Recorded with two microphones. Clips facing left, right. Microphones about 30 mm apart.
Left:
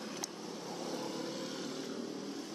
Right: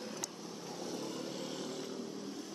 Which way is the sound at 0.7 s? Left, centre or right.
Centre.